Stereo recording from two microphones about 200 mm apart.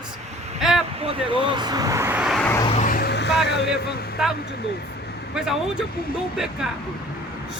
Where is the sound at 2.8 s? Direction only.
45° left (ahead or behind).